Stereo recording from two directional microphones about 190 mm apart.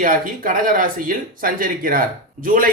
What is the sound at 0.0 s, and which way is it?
Speech, 45° right (ahead or behind).